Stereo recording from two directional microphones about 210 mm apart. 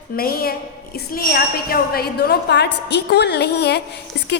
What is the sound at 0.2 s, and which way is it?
A woman's voice, 45° left (ahead or behind).